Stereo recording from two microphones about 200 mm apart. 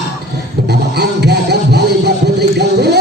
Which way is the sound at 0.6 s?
55° right (ahead or behind).